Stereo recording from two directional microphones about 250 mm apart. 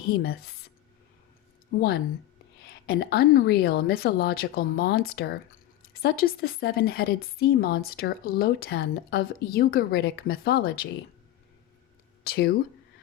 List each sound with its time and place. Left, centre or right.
0.1 s speech: left
2.6 s speech: left
12.2 s speech: left